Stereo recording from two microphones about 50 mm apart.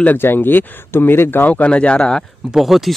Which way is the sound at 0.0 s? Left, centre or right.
Left.